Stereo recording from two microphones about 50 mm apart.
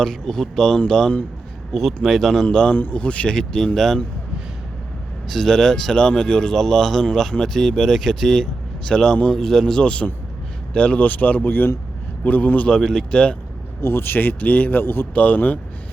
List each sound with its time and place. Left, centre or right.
0.0 s speech: centre
5.3 s speech: centre
9.8 s speech: left
12.6 s speech: centre
13.8 s speech: left
15.1 s speech: left